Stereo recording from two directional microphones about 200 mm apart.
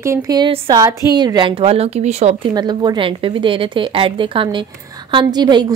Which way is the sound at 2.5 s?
20° right (ahead or behind).